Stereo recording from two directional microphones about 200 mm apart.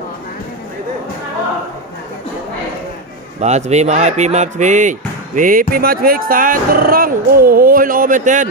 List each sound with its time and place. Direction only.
3.3 s speech: 35° right (ahead or behind)